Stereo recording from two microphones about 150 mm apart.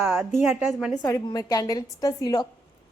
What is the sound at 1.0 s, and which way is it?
A woman's voice, 25° left (ahead or behind).